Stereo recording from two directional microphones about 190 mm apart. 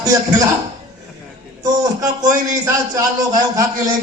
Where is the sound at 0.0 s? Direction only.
15° right (ahead or behind).